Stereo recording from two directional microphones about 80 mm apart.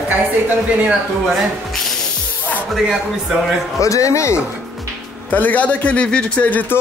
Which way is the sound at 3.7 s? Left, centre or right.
Left.